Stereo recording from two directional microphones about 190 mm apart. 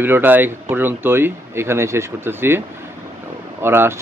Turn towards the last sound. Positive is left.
turn(degrees=-10)  # may be behind; listen again after turning